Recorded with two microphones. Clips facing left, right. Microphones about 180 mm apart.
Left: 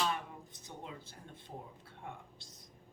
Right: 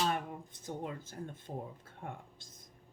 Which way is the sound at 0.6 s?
50° right (ahead or behind).